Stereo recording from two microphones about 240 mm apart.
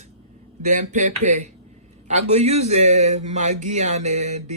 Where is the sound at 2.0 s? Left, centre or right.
Right.